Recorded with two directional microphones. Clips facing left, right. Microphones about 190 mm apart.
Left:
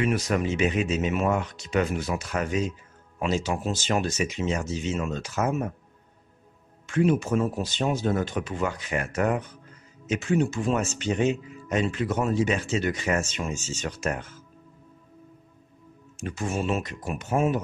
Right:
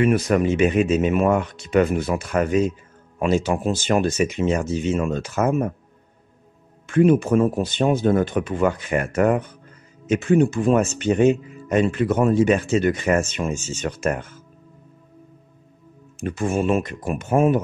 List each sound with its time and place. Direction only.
0.0 s speech: 55° right (ahead or behind)
6.9 s speech: 55° right (ahead or behind)
16.2 s speech: 55° right (ahead or behind)